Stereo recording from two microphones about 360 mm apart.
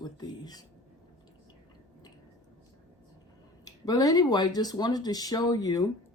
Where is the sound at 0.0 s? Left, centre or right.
Centre.